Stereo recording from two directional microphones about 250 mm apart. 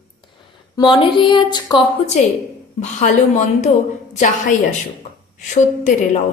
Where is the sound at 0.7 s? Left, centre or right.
Centre.